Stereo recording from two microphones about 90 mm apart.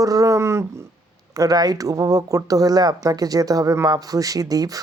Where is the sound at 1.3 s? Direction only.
45° right (ahead or behind).